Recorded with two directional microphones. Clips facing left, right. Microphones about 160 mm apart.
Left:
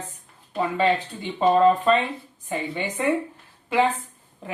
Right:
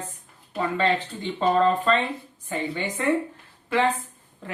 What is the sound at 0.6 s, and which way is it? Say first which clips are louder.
A woman's voice: left 2 dB; 15° left (ahead or behind).